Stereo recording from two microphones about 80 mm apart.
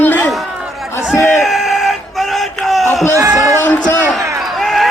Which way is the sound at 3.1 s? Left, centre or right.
Right.